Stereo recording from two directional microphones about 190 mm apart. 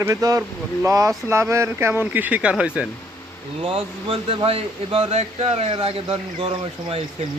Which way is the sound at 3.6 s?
30° right (ahead or behind).